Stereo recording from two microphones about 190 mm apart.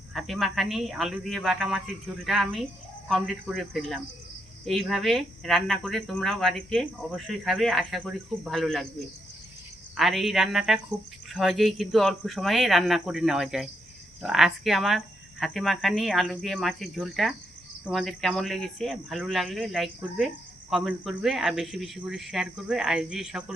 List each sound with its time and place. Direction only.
0.1 s speech: centre (ahead or behind)
9.9 s speech: centre (ahead or behind)